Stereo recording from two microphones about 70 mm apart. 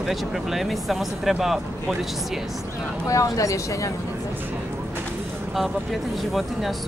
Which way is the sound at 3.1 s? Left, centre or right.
Left.